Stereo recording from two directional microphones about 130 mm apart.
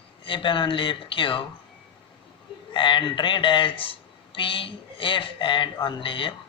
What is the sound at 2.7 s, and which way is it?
Speech, 40° left (ahead or behind).